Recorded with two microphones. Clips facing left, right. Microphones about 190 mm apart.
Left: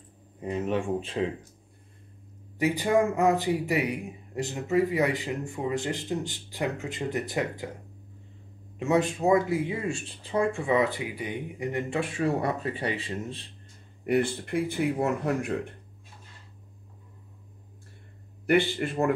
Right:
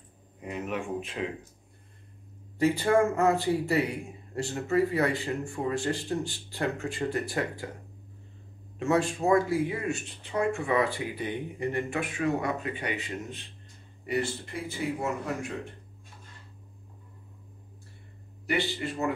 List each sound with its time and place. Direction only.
0.4 s speech: 30° left (ahead or behind)
2.6 s speech: 15° left (ahead or behind)
8.7 s speech: 20° left (ahead or behind)
11.9 s speech: 30° left (ahead or behind)
14.0 s speech: 55° left (ahead or behind)
18.5 s a man's voice: 55° left (ahead or behind)